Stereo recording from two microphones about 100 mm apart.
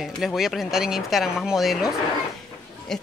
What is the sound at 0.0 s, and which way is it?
Speech, centre (ahead or behind).